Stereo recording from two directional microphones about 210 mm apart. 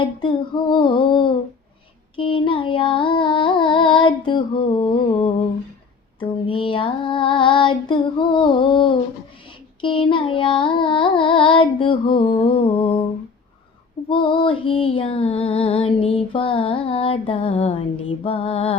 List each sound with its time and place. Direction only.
0.0 s music: 25° left (ahead or behind)
6.1 s child singing: 25° left (ahead or behind)
9.8 s music: 25° left (ahead or behind)
14.1 s music: 25° left (ahead or behind)